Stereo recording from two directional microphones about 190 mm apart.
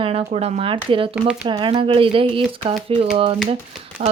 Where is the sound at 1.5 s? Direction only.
25° right (ahead or behind).